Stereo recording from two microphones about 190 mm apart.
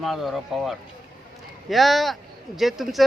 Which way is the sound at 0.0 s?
Centre (ahead or behind).